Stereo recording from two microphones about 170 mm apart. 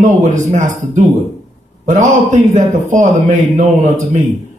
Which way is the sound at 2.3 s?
45° right (ahead or behind).